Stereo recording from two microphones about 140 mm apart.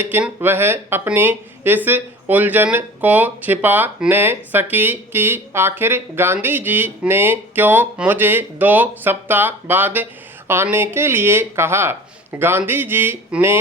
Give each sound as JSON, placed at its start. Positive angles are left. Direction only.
{"t": 0.0, "sound": "speech", "side_deg": -15}